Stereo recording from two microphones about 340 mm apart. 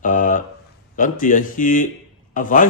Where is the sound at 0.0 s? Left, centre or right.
Left.